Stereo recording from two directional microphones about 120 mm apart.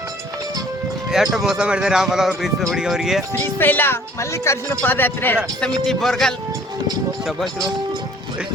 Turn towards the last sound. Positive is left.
turn(degrees=0)  # may be behind; listen again after turning